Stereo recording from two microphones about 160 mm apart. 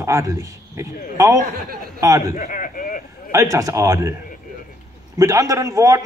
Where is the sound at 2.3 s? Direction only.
55° left (ahead or behind).